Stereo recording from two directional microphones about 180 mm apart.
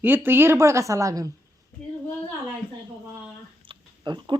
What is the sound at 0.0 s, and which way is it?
A woman's voice, 10° right (ahead or behind).